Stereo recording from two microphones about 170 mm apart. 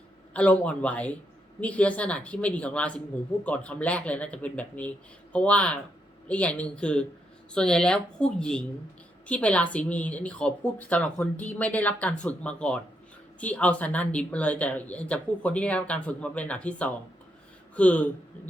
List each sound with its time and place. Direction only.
0.3 s a woman's voice: 5° left (ahead or behind)